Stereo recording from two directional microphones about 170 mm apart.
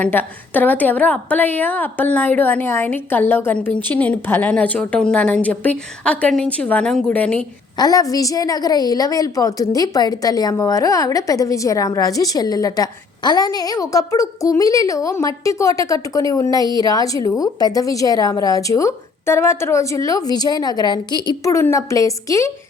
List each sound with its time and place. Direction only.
0.0 s a woman's voice: 10° left (ahead or behind)
7.8 s a woman's voice: 20° left (ahead or behind)